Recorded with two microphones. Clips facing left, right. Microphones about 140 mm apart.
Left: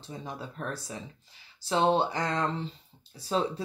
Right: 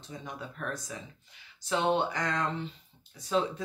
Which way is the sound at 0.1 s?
30° left (ahead or behind).